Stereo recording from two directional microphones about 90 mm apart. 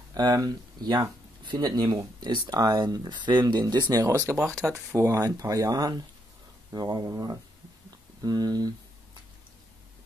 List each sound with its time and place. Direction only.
0.1 s speech: 45° right (ahead or behind)
3.6 s speech: 45° right (ahead or behind)
4.9 s speech: 20° right (ahead or behind)
5.2 s speech: 40° right (ahead or behind)